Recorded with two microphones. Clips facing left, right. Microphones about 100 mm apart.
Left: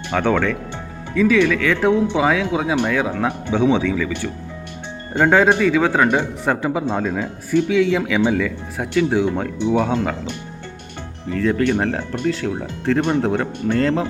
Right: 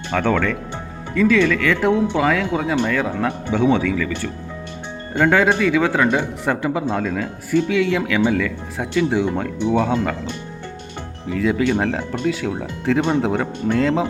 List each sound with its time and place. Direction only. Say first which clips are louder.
0.1 s speech: left 1 dB; 15° left (ahead or behind)
11.3 s speech: even; 5° right (ahead or behind)